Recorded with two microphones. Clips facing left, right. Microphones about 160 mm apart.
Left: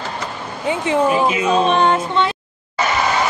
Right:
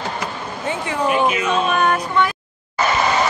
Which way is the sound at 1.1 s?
25° left (ahead or behind).